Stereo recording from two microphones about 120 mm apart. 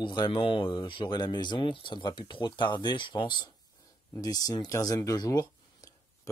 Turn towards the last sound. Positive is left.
turn(degrees=30)  # may be behind; listen again after turning